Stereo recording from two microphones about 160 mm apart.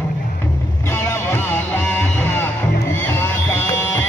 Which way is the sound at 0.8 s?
15° left (ahead or behind).